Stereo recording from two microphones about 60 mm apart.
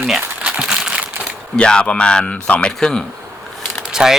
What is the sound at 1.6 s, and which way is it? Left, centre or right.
Speech, centre.